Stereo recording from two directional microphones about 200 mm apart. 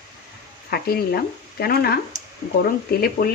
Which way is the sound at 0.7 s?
50° left (ahead or behind).